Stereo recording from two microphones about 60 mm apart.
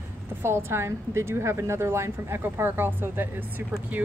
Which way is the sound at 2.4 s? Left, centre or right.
Right.